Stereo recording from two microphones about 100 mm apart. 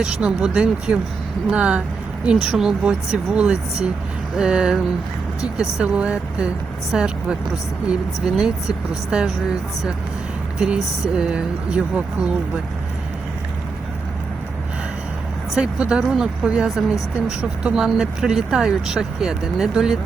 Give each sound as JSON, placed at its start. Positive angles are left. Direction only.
{"t": 0.0, "sound": "speech", "side_deg": -10}
{"t": 10.6, "sound": "speech", "side_deg": -5}
{"t": 15.5, "sound": "speech", "side_deg": -10}